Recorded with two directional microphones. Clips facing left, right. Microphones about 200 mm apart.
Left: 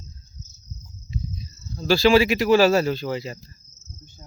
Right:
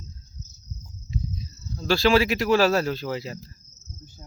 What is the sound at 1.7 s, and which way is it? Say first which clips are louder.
Speech: left 3 dB; 5° left (ahead or behind).